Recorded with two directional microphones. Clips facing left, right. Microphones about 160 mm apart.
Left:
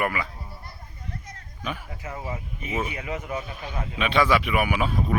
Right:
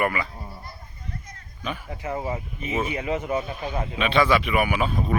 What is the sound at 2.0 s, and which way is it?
Speech, 30° right (ahead or behind).